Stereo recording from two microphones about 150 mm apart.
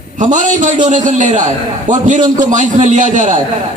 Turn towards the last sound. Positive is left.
turn(degrees=-55)  # may be behind; listen again after turning